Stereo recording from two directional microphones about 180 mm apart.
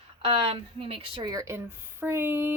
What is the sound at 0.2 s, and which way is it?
Speech, 30° right (ahead or behind).